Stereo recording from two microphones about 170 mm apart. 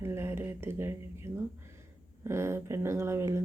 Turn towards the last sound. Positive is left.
turn(degrees=-15)  # may be behind; listen again after turning